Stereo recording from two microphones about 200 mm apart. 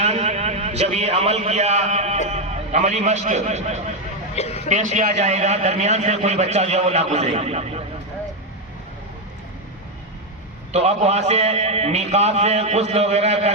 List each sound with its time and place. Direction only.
0.0 s a man's voice: 35° right (ahead or behind)
4.4 s a sound: 30° left (ahead or behind)
4.7 s a man's voice: 35° right (ahead or behind)
10.7 s a man's voice: 35° right (ahead or behind)